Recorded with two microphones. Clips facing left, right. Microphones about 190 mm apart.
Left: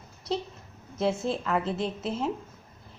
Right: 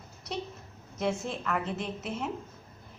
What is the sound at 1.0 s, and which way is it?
A woman's voice, 30° left (ahead or behind).